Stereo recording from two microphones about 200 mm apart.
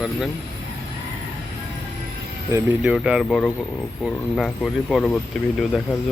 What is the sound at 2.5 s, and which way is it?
Speech, 15° right (ahead or behind).